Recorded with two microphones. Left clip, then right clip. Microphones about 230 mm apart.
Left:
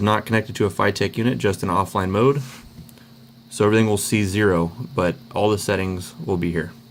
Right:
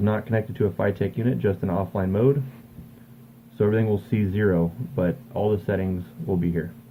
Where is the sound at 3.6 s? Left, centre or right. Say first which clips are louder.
Left 5 dB; left.